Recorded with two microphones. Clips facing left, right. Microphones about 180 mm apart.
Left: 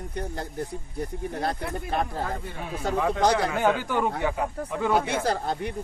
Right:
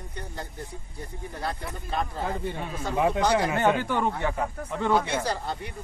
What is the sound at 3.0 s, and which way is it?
Speech, 15° right (ahead or behind).